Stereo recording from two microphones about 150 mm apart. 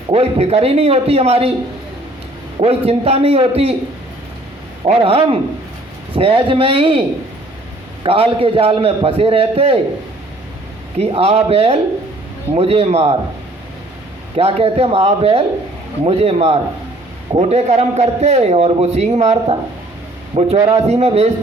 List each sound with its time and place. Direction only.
0.1 s a man's voice: 40° right (ahead or behind)
2.6 s a man's voice: 40° right (ahead or behind)
4.9 s a man's voice: 40° right (ahead or behind)
8.0 s a man's voice: 40° right (ahead or behind)
10.9 s a man's voice: 40° right (ahead or behind)
14.3 s a man's voice: 40° right (ahead or behind)